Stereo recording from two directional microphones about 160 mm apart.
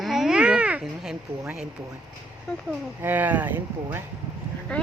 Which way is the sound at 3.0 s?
10° right (ahead or behind).